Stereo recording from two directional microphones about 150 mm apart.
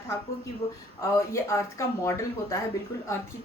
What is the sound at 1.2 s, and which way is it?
Speech, 20° left (ahead or behind).